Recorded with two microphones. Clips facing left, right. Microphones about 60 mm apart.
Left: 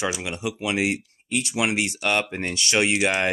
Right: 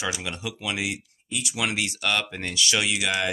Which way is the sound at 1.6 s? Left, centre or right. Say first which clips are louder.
Left 2 dB; left.